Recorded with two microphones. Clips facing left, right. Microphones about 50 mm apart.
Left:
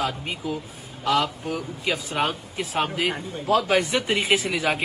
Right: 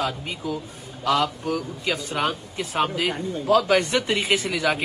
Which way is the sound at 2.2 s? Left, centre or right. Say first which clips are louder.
Even; centre.